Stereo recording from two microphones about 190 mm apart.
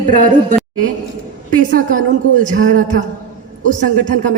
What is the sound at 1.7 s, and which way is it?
Speech, 45° right (ahead or behind).